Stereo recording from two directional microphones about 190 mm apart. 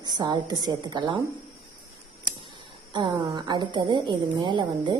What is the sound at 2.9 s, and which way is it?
A woman's voice, 25° right (ahead or behind).